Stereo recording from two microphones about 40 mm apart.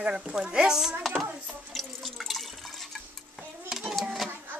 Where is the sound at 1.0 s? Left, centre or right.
Centre.